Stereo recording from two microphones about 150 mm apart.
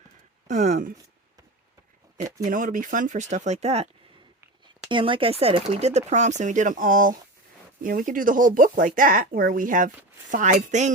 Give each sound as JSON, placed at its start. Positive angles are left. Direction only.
{"t": 0.4, "sound": "speech", "side_deg": -50}
{"t": 2.4, "sound": "speech", "side_deg": -65}
{"t": 4.9, "sound": "speech", "side_deg": -35}